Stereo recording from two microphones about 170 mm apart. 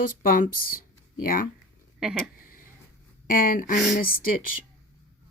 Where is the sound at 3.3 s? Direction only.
55° left (ahead or behind).